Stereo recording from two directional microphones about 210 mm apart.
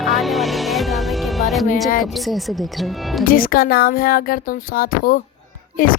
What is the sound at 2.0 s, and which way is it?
Speech, centre (ahead or behind).